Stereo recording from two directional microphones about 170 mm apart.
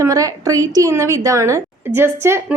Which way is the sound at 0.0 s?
20° right (ahead or behind).